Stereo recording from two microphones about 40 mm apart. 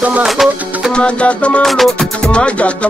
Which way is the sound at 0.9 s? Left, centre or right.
Left.